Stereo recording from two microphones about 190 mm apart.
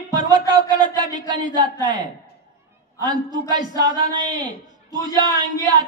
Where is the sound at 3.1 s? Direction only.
20° right (ahead or behind).